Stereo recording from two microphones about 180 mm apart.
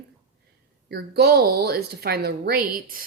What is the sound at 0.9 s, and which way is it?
Speech, 60° right (ahead or behind).